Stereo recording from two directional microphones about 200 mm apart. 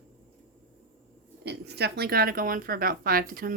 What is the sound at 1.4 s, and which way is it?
Speech, 55° right (ahead or behind).